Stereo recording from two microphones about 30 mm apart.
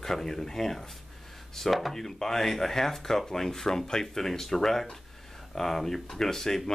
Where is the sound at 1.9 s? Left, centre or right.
Centre.